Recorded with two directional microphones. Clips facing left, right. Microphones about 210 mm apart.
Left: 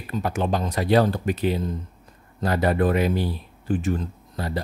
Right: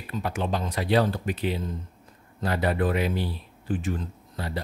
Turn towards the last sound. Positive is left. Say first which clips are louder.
# left 4 dB
turn(degrees=45)  # may be behind; listen again after turning